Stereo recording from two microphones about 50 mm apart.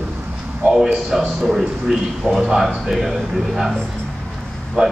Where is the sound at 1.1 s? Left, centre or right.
Centre.